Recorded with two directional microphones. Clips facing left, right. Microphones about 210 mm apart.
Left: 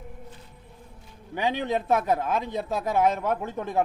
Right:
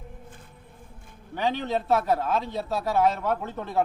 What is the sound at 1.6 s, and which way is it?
Speech, 15° left (ahead or behind).